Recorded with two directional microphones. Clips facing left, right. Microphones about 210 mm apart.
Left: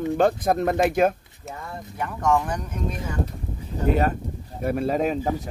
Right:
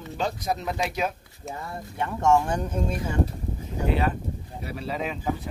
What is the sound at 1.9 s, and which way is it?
Speech, 25° right (ahead or behind).